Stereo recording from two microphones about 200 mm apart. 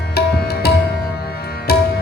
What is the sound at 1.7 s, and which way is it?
Music, 50° left (ahead or behind).